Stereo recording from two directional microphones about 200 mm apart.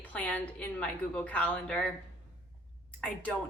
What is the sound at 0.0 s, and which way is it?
A woman's voice, 5° left (ahead or behind).